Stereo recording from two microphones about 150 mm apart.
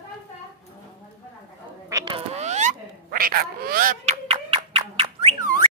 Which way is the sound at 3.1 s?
80° right.